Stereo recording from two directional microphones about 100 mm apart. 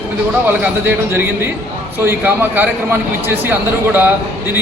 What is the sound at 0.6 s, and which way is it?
A man's voice, 20° right (ahead or behind).